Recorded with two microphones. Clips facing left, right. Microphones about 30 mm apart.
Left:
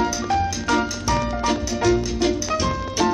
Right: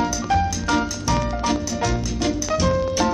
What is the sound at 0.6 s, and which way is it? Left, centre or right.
Music, centre.